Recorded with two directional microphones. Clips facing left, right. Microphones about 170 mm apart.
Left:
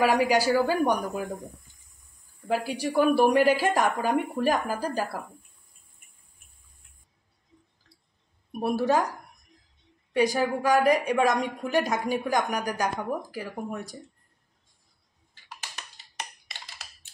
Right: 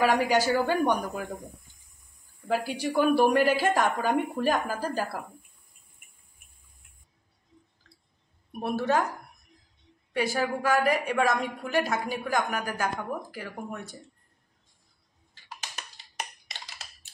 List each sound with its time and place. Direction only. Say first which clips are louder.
0.0 s a woman's voice: left 1 dB; 10° left (ahead or behind)
2.4 s a woman's voice: left 1 dB; 5° left (ahead or behind)
8.5 s a woman's voice: left 3 dB; 10° left (ahead or behind)
10.1 s a woman's voice: left 4 dB; 15° left (ahead or behind)